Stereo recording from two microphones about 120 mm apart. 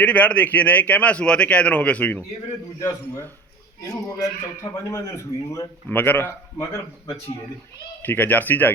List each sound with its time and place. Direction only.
0.0 s a man's voice: 10° left (ahead or behind)
3.8 s a man's voice: 30° left (ahead or behind); by 6.3 s 15° left (ahead or behind)
8.0 s a man's voice: 15° left (ahead or behind)